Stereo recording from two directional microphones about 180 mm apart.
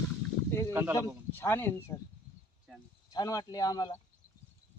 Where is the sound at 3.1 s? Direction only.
20° left (ahead or behind).